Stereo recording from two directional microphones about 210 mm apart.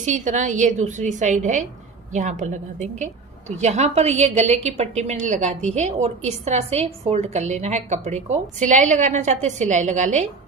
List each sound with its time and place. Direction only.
0.0 s a woman's voice: 35° right (ahead or behind)